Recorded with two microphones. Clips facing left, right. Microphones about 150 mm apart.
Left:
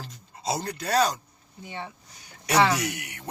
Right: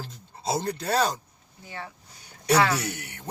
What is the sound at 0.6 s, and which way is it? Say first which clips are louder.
Speech: right 3 dB; 25° right (ahead or behind).